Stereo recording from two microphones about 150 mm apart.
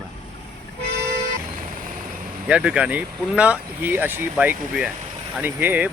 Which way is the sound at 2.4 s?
5° right (ahead or behind).